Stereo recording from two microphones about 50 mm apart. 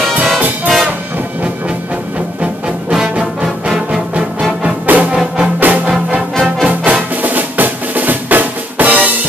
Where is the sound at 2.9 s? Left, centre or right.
Centre.